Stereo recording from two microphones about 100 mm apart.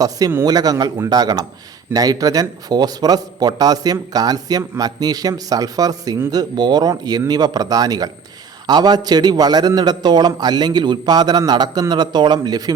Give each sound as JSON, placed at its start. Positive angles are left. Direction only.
{"t": 0.4, "sound": "a man's voice", "side_deg": -40}